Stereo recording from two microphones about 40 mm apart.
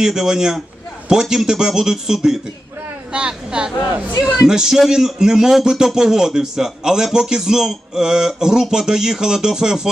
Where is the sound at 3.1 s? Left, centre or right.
Right.